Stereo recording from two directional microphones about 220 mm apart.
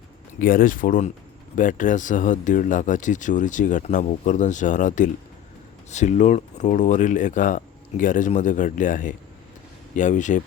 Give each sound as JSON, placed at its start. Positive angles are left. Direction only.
{"t": 0.3, "sound": "speech", "side_deg": 40}